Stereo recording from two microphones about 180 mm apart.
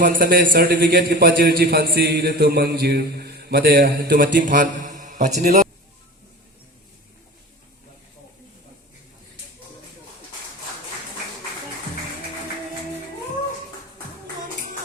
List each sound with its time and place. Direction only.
0.0 s a man's voice: 50° right (ahead or behind)